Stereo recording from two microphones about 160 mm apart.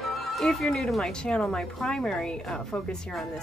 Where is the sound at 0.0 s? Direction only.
Centre (ahead or behind).